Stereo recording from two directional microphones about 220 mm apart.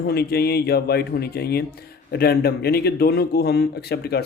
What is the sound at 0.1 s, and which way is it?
A man's voice, 45° left (ahead or behind).